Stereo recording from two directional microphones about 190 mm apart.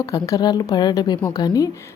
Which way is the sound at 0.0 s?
15° left (ahead or behind).